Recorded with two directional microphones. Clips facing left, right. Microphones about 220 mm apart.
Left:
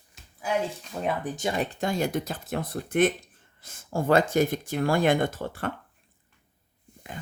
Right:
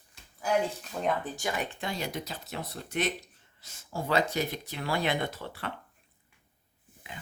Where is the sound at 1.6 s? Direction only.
40° left (ahead or behind).